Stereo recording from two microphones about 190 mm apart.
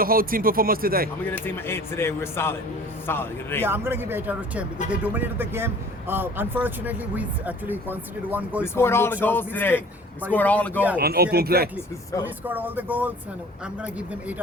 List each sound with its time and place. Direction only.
0.0 s speech: 50° right (ahead or behind)
1.3 s speech: 10° left (ahead or behind)
3.6 s speech: 10° right (ahead or behind)
8.6 s speech: 15° left (ahead or behind)
10.8 s speech: 10° right (ahead or behind)
11.0 s speech: 55° right (ahead or behind)
12.2 s speech: 10° right (ahead or behind)